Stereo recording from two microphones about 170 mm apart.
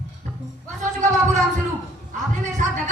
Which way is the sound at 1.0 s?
45° right (ahead or behind).